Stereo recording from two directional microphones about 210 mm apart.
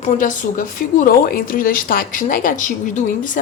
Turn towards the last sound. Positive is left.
turn(degrees=40)  # may be behind; listen again after turning